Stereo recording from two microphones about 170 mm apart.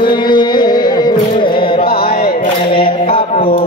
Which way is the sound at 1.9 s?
60° left (ahead or behind).